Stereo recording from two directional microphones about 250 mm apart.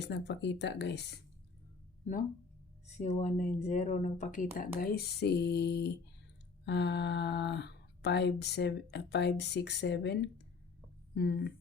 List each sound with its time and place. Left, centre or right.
0.0 s speech: left
3.0 s speech: left